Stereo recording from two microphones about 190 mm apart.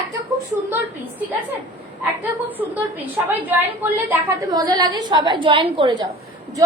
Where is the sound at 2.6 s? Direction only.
10° right (ahead or behind).